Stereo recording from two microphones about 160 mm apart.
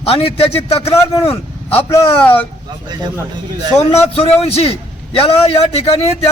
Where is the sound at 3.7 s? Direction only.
40° left (ahead or behind).